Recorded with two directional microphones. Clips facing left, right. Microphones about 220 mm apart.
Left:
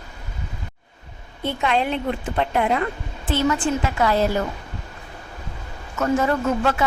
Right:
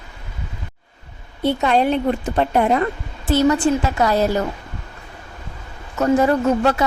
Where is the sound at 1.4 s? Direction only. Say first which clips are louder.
Right 5 dB; 40° right (ahead or behind).